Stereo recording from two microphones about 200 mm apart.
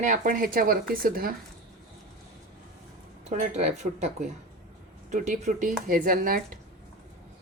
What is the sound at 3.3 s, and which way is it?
Speech, 35° right (ahead or behind).